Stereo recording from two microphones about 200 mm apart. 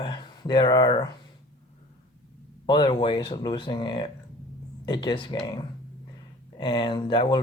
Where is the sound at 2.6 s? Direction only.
20° left (ahead or behind).